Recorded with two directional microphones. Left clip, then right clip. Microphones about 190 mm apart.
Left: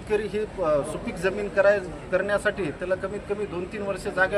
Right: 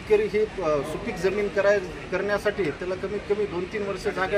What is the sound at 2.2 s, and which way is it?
Speech, 20° left (ahead or behind).